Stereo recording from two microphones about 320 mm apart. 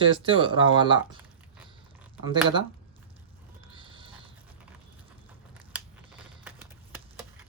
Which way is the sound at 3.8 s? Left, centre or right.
Centre.